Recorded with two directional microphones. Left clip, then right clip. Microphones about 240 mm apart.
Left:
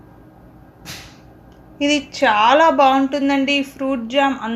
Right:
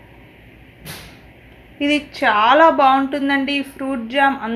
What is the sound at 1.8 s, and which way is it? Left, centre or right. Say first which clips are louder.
A woman's voice: left 1 dB; left.